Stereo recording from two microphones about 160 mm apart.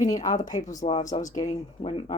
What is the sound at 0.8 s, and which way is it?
Speech, 40° left (ahead or behind).